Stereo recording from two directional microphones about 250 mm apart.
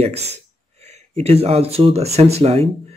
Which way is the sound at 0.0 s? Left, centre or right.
Right.